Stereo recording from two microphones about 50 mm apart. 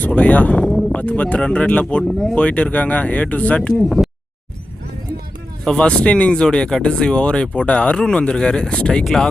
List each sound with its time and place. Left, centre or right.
0.1 s speech: left
0.6 s a sound: centre
0.9 s speech: left
2.0 s speech: centre
2.3 s speech: left
3.8 s speech: centre
5.6 s speech: centre
5.9 s speech: left
6.4 s speech: centre